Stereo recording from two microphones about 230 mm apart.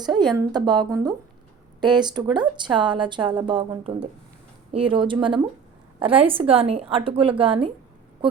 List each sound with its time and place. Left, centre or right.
0.2 s a woman's voice: centre